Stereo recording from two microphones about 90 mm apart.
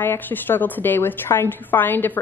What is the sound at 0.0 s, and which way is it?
A woman's voice, 25° left (ahead or behind).